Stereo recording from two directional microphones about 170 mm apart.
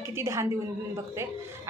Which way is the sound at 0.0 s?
15° right (ahead or behind).